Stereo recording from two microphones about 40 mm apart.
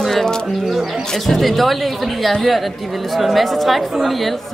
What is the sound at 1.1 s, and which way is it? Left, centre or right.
Speech, centre.